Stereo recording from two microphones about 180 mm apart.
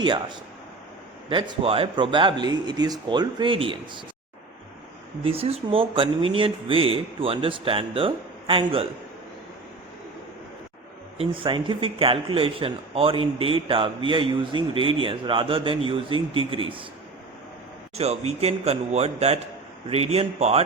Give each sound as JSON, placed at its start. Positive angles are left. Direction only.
{"t": 0.0, "sound": "speech", "side_deg": -25}
{"t": 5.2, "sound": "speech", "side_deg": -30}
{"t": 11.2, "sound": "speech", "side_deg": -30}
{"t": 17.9, "sound": "speech", "side_deg": -35}